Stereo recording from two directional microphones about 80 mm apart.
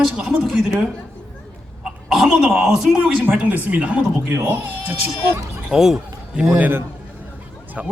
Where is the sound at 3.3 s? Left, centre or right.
Centre.